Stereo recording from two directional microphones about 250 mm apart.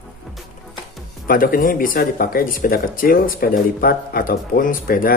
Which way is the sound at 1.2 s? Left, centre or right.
Left.